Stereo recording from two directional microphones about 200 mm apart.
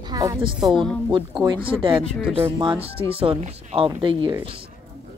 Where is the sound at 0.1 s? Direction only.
20° right (ahead or behind).